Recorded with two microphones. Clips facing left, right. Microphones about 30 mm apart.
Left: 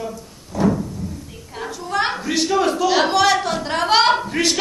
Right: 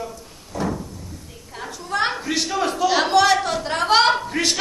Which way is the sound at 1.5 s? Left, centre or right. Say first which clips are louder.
Left 2 dB; centre.